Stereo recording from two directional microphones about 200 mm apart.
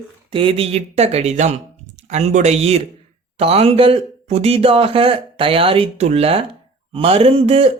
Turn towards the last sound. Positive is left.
turn(degrees=-30)  # may be behind; listen again after turning